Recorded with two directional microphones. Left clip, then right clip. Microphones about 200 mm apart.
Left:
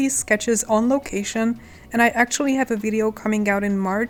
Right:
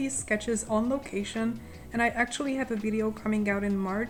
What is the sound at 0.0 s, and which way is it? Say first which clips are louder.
Speech: left 10 dB; 45° left (ahead or behind).